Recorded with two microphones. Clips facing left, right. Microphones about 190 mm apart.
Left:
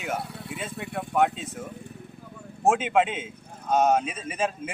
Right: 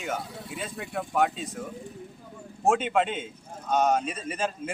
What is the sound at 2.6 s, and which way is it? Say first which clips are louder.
Speech: left 2 dB; 5° left (ahead or behind).